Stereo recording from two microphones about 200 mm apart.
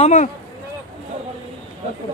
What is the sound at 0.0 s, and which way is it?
Speech, 40° left (ahead or behind).